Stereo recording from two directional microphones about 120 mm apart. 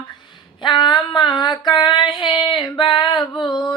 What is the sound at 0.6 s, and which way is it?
Female singing, 40° left (ahead or behind).